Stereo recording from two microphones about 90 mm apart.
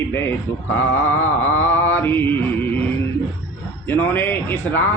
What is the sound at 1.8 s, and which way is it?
Speech, 25° left (ahead or behind).